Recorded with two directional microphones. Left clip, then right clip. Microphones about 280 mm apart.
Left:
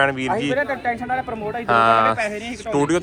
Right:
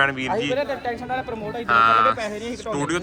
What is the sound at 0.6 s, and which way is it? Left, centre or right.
Speech, left.